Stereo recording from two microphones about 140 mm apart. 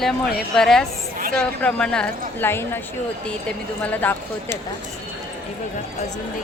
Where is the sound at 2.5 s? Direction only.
15° left (ahead or behind).